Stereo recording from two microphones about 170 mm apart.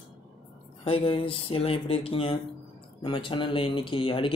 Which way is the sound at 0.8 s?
35° left (ahead or behind).